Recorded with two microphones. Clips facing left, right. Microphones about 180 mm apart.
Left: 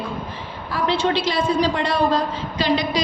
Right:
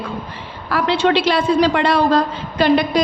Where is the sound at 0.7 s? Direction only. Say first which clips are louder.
Right 4 dB; 70° right (ahead or behind).